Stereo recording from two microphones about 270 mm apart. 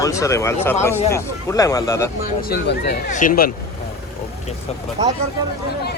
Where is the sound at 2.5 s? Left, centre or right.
Left.